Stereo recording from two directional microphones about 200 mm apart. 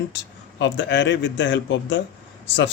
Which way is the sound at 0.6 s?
65° left (ahead or behind).